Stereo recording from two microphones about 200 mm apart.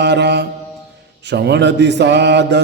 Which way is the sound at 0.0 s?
60° right (ahead or behind).